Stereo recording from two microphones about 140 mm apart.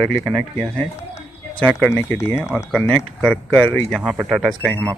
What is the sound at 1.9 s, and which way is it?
Speech, 15° left (ahead or behind).